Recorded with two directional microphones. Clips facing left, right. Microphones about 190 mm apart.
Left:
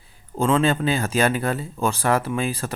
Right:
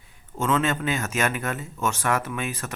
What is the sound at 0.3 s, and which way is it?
Speech, 30° left (ahead or behind).